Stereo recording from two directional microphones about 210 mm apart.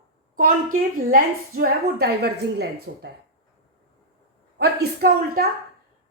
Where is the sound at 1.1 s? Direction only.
45° right (ahead or behind).